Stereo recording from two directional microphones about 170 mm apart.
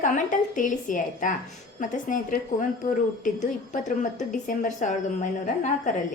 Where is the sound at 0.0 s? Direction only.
50° left (ahead or behind).